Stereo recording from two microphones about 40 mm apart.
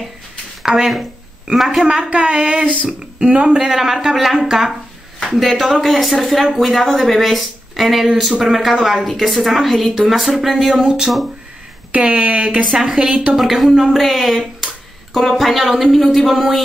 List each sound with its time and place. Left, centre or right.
0.7 s a woman's voice: centre
2.0 s speech: right
3.6 s a man's voice: centre
10.8 s speech: right
12.1 s speech: right
12.7 s speech: centre
13.4 s a woman's voice: centre